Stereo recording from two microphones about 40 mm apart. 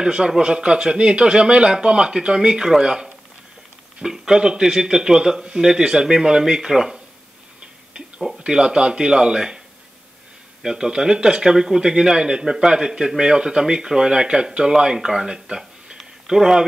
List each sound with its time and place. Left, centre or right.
0.0 s a man's voice: right
8.5 s speech: right
10.6 s speech: centre